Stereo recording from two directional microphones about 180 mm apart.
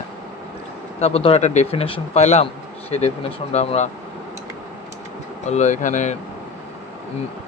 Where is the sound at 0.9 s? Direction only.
35° left (ahead or behind).